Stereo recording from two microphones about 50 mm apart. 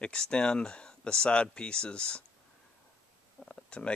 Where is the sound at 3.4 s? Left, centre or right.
Centre.